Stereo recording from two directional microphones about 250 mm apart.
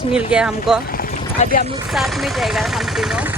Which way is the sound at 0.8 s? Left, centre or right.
Left.